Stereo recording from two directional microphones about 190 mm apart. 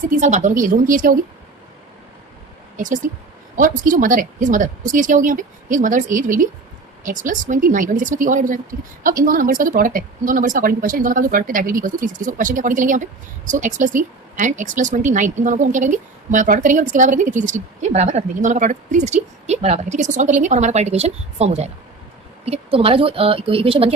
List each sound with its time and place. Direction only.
0.1 s speech: 40° right (ahead or behind)
2.7 s a woman's voice: 45° right (ahead or behind)